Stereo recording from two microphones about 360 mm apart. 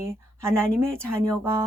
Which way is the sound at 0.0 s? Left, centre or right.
Centre.